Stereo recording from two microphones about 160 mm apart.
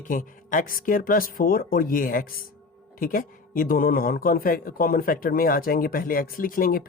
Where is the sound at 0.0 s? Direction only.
55° left (ahead or behind).